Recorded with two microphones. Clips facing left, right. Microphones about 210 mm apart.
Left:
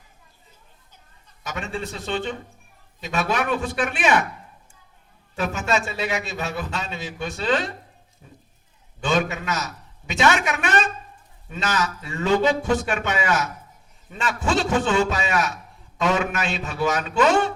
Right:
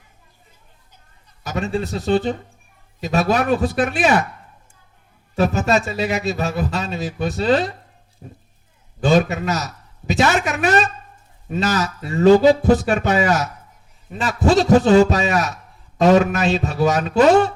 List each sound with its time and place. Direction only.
1.5 s a man's voice: 35° right (ahead or behind)
5.4 s a man's voice: 35° right (ahead or behind)